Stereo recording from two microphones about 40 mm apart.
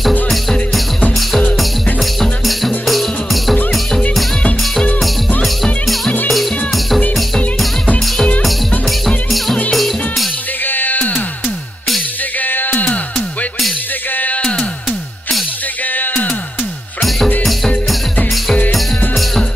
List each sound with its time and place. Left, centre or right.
0.3 s music: centre
2.9 s music: centre
6.2 s music: centre
8.4 s music: centre
10.6 s music: left
12.4 s music: left
12.8 s music: left
14.4 s music: left
15.8 s music: left